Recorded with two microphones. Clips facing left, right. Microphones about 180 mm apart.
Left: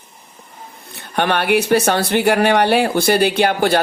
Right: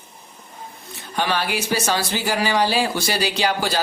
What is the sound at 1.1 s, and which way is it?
A man's voice, 60° left (ahead or behind).